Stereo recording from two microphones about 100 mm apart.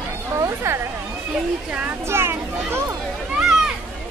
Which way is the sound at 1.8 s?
25° right (ahead or behind).